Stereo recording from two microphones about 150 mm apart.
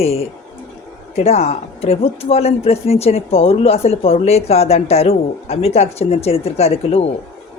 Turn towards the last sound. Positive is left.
turn(degrees=45)  # may be behind; listen again after turning